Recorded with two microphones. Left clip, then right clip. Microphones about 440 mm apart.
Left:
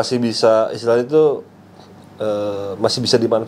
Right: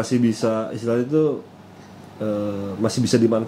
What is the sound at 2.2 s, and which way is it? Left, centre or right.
Speech, left.